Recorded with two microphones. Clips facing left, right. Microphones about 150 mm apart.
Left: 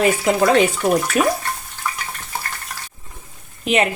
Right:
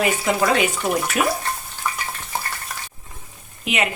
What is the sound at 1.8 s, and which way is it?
Frying, 10° right (ahead or behind).